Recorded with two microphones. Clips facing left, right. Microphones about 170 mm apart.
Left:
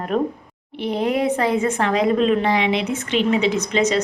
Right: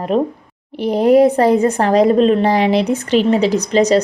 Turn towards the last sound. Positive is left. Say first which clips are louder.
# right 6 dB
turn(degrees=-35)  # may be behind; listen again after turning